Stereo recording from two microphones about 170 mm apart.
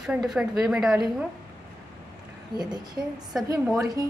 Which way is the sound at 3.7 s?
20° right (ahead or behind).